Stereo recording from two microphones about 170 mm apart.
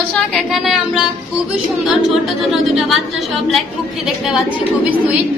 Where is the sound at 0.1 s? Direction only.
Centre (ahead or behind).